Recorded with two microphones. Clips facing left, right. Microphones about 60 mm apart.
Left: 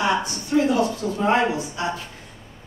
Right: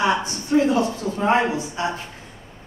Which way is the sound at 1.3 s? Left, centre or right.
Right.